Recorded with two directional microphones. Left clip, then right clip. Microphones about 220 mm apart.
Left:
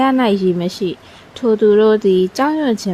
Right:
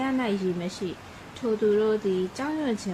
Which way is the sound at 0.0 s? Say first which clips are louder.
Left 13 dB; 50° left (ahead or behind).